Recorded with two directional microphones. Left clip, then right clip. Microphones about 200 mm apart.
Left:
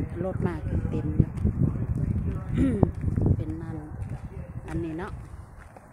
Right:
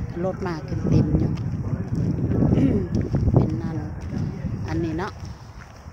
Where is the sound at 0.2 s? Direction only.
20° right (ahead or behind).